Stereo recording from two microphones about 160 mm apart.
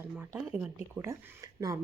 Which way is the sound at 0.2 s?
10° right (ahead or behind).